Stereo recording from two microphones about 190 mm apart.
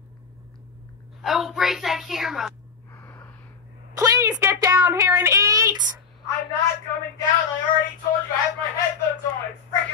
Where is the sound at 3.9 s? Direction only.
15° right (ahead or behind).